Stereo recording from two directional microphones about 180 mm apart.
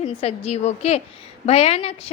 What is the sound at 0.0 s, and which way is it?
A woman's voice, 35° left (ahead or behind).